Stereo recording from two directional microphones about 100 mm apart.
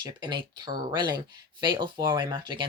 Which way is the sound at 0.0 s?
50° right (ahead or behind).